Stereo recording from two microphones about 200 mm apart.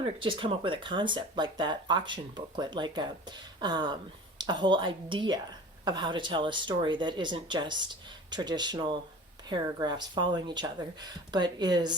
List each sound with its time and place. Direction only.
0.0 s speech: 25° right (ahead or behind)